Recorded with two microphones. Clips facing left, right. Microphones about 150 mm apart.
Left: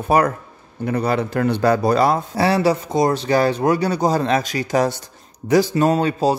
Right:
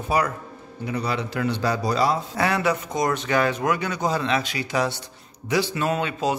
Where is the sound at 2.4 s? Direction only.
30° left (ahead or behind).